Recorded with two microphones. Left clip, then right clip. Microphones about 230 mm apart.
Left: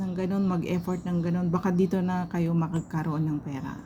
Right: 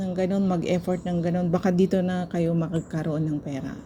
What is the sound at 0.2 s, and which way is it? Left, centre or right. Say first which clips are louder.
A woman's voice: right 5 dB; centre.